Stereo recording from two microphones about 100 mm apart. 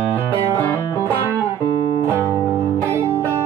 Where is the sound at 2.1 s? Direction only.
25° right (ahead or behind).